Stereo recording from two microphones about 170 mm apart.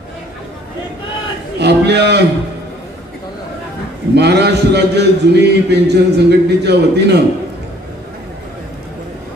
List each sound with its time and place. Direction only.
1.6 s a man's voice: 80° right
4.1 s a man's voice: 75° right (ahead or behind)